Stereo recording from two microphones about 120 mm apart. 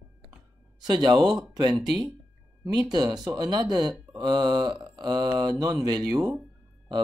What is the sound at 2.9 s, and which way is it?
Speech, 35° right (ahead or behind).